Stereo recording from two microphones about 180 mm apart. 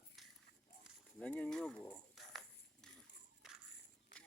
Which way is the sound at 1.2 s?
5° left (ahead or behind).